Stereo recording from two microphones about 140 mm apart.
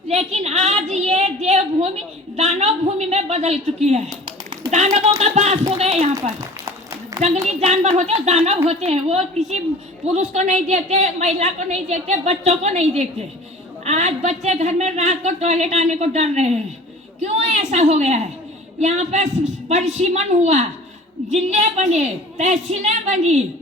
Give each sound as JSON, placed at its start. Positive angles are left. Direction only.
{"t": 0.1, "sound": "a sound", "side_deg": -50}
{"t": 2.3, "sound": "a woman's voice", "side_deg": -50}
{"t": 7.2, "sound": "a woman's voice", "side_deg": -50}